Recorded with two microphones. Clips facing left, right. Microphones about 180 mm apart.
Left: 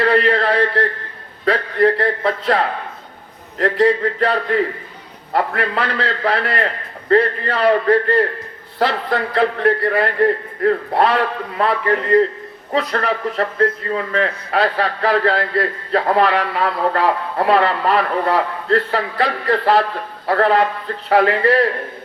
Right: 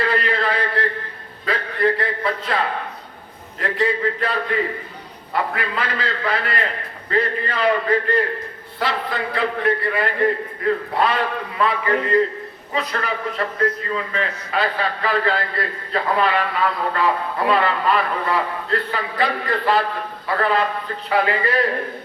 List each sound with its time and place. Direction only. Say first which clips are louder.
0.0 s a man's voice: left 6 dB; 65° left (ahead or behind)